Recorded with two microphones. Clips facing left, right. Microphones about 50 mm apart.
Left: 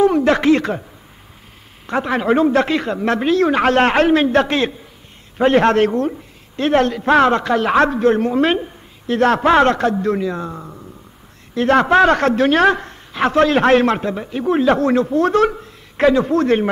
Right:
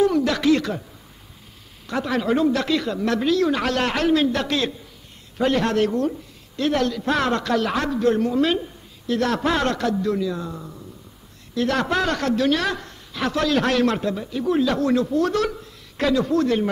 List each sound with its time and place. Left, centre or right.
0.0 s speech: left
1.9 s speech: left